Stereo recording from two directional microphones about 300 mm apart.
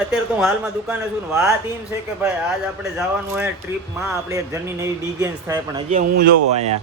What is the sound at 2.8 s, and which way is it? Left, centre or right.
A woman's voice, centre.